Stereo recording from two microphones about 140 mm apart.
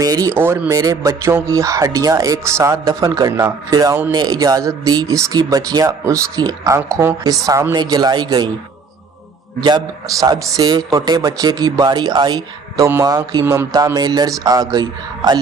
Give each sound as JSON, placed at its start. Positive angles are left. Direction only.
{"t": 0.0, "sound": "speech", "side_deg": -25}
{"t": 9.6, "sound": "speech", "side_deg": -30}
{"t": 13.4, "sound": "music", "side_deg": -15}
{"t": 13.7, "sound": "speech", "side_deg": -25}